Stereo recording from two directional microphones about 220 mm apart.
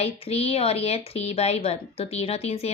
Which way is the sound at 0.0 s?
25° left (ahead or behind).